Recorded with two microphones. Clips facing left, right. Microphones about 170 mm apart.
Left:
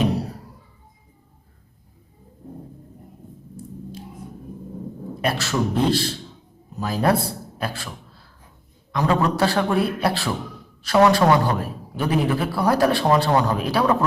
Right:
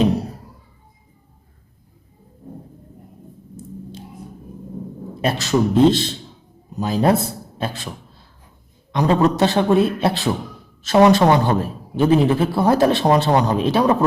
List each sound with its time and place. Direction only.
5.2 s a man's voice: 20° right (ahead or behind)